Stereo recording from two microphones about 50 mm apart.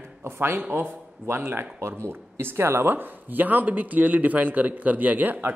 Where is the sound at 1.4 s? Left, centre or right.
Right.